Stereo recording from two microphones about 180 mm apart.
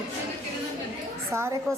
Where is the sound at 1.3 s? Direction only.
15° right (ahead or behind).